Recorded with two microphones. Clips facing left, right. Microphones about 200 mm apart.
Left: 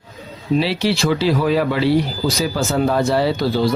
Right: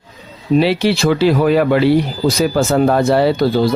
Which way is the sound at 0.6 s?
55° right (ahead or behind).